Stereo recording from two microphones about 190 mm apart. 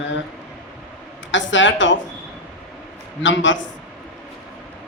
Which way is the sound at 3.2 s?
75° left (ahead or behind).